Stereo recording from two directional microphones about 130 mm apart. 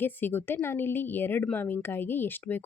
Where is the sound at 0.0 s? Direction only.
15° left (ahead or behind).